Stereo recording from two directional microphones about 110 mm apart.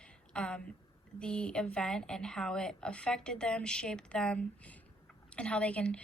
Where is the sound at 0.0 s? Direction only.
10° left (ahead or behind).